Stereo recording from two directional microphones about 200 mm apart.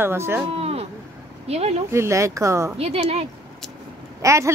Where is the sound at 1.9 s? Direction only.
15° right (ahead or behind).